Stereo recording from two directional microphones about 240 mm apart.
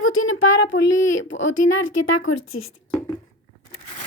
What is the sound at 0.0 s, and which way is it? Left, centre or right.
Speech, left.